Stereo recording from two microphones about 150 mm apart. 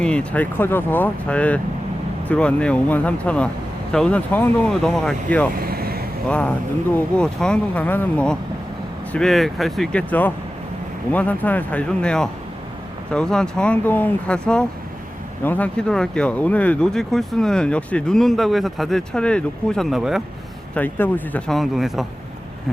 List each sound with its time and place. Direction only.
0.0 s speech: 5° left (ahead or behind)
5.5 s vehicle: 85° right
6.2 s speech: 10° left (ahead or behind)
20.7 s speech: 10° left (ahead or behind)